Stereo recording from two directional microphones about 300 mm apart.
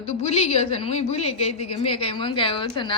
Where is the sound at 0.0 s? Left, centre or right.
Left.